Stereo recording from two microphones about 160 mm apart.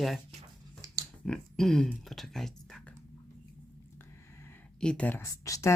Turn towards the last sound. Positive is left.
turn(degrees=20)  # may be behind; listen again after turning